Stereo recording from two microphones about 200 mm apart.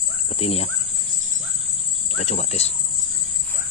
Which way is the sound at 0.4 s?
30° left (ahead or behind).